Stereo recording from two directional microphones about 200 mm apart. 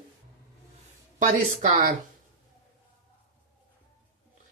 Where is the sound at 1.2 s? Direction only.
40° right (ahead or behind).